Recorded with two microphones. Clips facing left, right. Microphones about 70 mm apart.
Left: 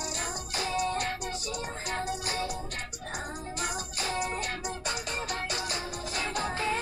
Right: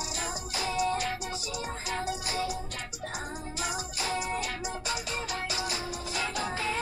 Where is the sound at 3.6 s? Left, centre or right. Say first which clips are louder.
Right 1 dB; left.